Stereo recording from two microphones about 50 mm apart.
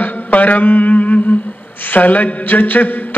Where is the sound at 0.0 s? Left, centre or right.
Left.